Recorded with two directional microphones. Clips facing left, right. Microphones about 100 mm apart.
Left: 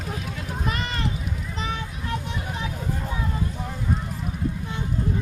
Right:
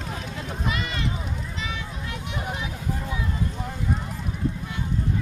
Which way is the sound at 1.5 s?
40° left (ahead or behind).